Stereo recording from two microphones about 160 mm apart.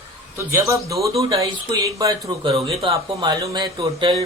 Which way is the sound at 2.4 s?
35° right (ahead or behind).